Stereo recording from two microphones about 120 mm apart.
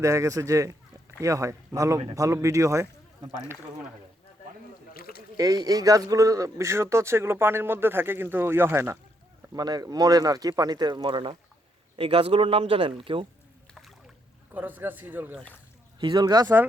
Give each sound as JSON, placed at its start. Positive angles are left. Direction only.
{"t": 0.0, "sound": "a man's voice", "side_deg": -25}
{"t": 5.4, "sound": "a man's voice", "side_deg": -30}
{"t": 9.6, "sound": "speech", "side_deg": -35}
{"t": 14.5, "sound": "speech", "side_deg": -15}
{"t": 15.4, "sound": "speech", "side_deg": 15}
{"t": 16.0, "sound": "speech", "side_deg": -35}